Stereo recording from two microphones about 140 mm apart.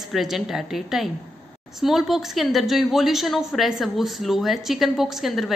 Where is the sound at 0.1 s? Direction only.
Centre (ahead or behind).